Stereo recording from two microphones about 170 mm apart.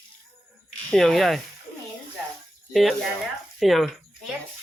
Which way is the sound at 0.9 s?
Centre (ahead or behind).